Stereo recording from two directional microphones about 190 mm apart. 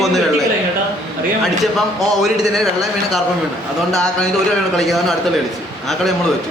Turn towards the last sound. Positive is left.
turn(degrees=0)  # may be behind; listen again after turning